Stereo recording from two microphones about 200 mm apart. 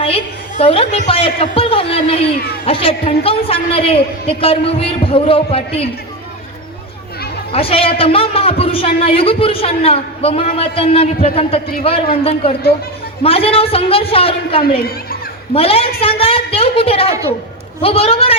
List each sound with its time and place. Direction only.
0.0 s a man's voice: 30° left (ahead or behind)
7.5 s a man's voice: 30° left (ahead or behind)
13.2 s a man's voice: 30° left (ahead or behind)